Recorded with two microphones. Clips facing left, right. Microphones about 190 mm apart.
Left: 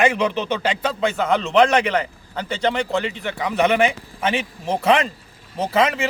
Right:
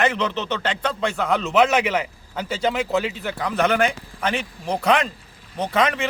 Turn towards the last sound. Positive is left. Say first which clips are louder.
# left 2 dB
turn(degrees=5)  # may be behind; listen again after turning